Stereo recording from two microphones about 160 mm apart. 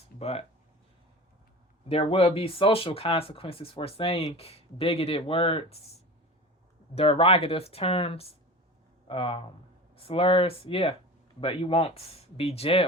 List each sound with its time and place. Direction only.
0.2 s speech: 40° left (ahead or behind)
1.9 s speech: 35° left (ahead or behind)
6.9 s speech: 35° left (ahead or behind)